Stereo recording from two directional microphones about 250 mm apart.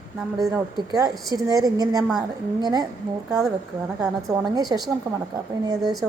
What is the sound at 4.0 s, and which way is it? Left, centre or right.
A woman's voice, centre.